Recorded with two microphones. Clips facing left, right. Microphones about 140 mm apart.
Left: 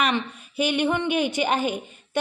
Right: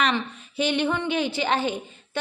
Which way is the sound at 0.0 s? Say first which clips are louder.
Even; 10° left (ahead or behind).